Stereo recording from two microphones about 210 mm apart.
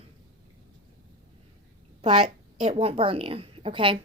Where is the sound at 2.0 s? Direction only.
25° right (ahead or behind).